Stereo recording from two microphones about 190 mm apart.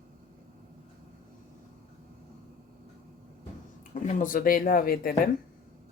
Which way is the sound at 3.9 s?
40° left (ahead or behind).